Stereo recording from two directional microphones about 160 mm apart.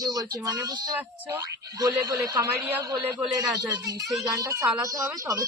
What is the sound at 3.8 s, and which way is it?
Speech, 20° right (ahead or behind).